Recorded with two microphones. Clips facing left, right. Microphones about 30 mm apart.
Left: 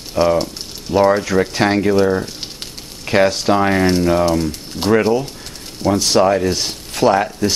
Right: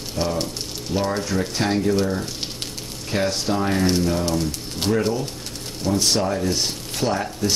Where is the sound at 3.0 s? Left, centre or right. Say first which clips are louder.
Left 9 dB; left.